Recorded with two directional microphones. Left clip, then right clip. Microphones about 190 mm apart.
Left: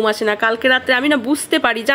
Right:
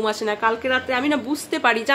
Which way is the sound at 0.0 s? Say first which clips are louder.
Left 5 dB; 25° left (ahead or behind).